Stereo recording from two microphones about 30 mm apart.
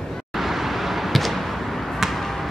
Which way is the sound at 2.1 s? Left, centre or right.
Centre.